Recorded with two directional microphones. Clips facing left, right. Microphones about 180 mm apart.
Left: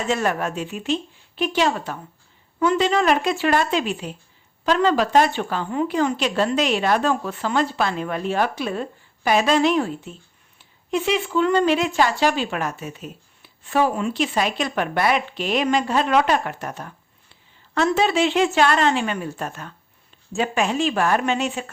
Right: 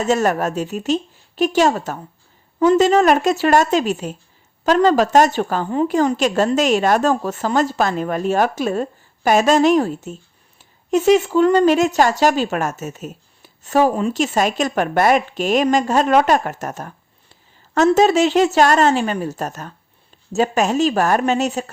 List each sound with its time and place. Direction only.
0.0 s a woman's voice: 40° right (ahead or behind)